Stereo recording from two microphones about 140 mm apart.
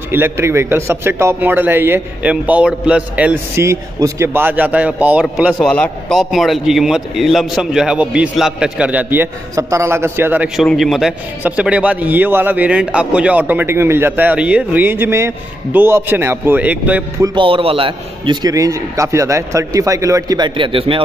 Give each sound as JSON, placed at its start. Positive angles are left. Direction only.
{"t": 0.1, "sound": "a man's voice", "side_deg": -15}
{"t": 3.5, "sound": "a man's voice", "side_deg": -20}
{"t": 5.5, "sound": "a man's voice", "side_deg": 5}
{"t": 10.5, "sound": "a man's voice", "side_deg": 0}
{"t": 17.2, "sound": "a man's voice", "side_deg": -35}